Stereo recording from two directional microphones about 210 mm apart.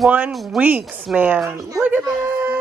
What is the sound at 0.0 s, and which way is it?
Speech, 5° right (ahead or behind).